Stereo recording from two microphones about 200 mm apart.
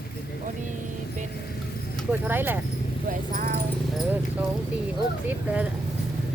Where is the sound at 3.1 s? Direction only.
40° right (ahead or behind).